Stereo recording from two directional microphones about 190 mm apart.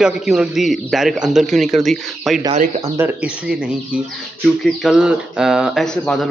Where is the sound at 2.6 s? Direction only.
35° right (ahead or behind).